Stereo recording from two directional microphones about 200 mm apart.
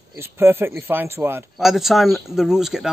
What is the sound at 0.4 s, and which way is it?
Speech, 10° right (ahead or behind).